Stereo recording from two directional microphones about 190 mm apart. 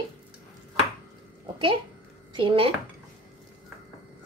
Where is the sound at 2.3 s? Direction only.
25° right (ahead or behind).